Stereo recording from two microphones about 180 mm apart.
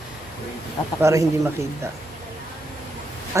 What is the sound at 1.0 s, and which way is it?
Speech, 15° right (ahead or behind).